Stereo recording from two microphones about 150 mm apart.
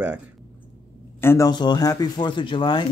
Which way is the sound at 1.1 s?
20° left (ahead or behind).